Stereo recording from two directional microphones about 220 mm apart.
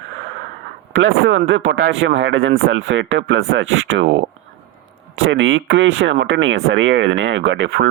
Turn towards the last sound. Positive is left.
turn(degrees=-55)  # may be behind; listen again after turning